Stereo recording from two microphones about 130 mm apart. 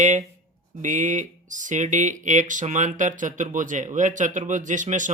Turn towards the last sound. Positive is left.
turn(degrees=-75)  # may be behind; listen again after turning